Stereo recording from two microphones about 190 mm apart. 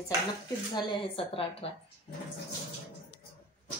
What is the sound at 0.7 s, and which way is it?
A woman's voice, 25° left (ahead or behind).